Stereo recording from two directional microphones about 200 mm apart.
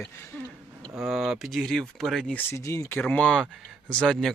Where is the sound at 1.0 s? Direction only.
Centre (ahead or behind).